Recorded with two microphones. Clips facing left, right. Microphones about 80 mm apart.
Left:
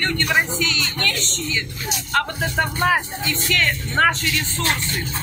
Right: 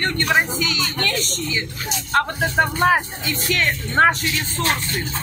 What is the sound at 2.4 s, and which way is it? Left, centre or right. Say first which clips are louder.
Speech: right 3 dB; right.